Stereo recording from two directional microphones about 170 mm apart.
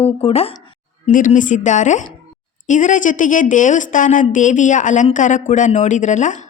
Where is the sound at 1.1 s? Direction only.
50° left (ahead or behind).